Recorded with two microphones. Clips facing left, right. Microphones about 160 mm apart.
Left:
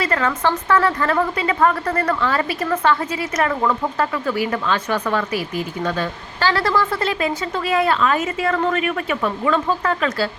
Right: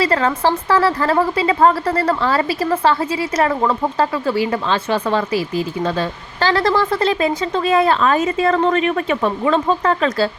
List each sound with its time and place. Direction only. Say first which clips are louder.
0.0 s a woman's voice: right 3 dB; 30° right (ahead or behind)